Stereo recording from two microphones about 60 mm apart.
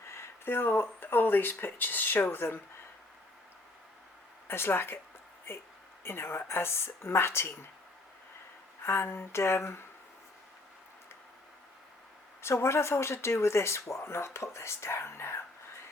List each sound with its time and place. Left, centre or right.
0.1 s speech: left
4.4 s speech: left
6.1 s speech: left
8.8 s speech: left
12.4 s speech: left